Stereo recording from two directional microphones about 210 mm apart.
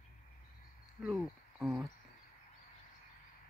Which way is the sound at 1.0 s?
Centre (ahead or behind).